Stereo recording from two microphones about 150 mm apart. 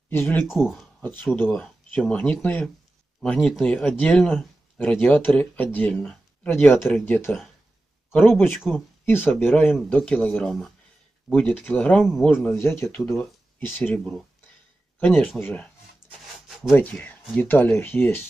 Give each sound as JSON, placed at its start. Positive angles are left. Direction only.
{"t": 0.1, "sound": "speech", "side_deg": 15}
{"t": 0.5, "sound": "speech", "side_deg": -5}
{"t": 1.0, "sound": "speech", "side_deg": 15}
{"t": 8.5, "sound": "speech", "side_deg": 0}
{"t": 9.0, "sound": "speech", "side_deg": 15}
{"t": 12.5, "sound": "speech", "side_deg": 15}
{"t": 16.7, "sound": "speech", "side_deg": 10}